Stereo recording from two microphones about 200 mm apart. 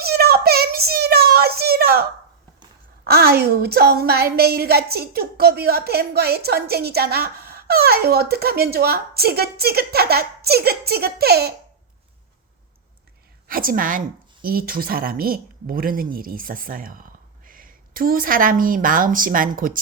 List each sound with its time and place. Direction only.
0.0 s a sound: 50° right (ahead or behind)
3.0 s a woman's voice: 50° right (ahead or behind)
13.5 s a woman's voice: 45° right (ahead or behind)